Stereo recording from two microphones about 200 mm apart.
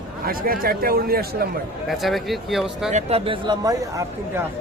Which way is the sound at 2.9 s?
35° right (ahead or behind).